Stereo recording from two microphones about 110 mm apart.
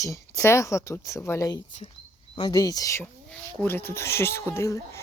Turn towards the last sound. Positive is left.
turn(degrees=25)  # may be behind; listen again after turning